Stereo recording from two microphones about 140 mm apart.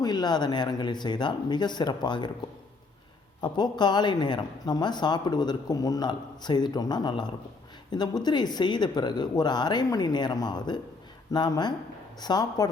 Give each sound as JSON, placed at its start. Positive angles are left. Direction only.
{"t": 0.0, "sound": "speech", "side_deg": 30}
{"t": 3.4, "sound": "speech", "side_deg": 30}